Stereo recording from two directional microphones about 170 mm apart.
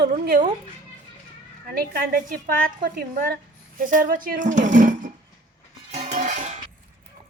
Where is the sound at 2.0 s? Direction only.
55° right (ahead or behind).